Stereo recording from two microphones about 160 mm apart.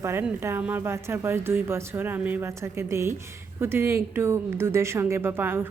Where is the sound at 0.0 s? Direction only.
15° right (ahead or behind).